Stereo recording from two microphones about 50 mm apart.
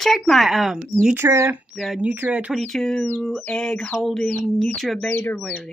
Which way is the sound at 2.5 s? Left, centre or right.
Centre.